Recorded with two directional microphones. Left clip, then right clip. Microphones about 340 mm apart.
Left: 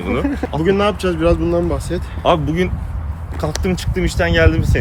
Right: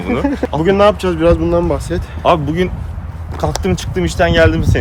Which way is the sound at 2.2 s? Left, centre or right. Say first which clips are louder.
Right 3 dB; centre.